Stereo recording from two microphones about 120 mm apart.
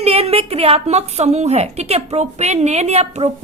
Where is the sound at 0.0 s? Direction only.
55° right (ahead or behind).